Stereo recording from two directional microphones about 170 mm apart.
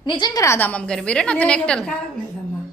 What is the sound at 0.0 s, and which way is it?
A woman's voice, 25° left (ahead or behind).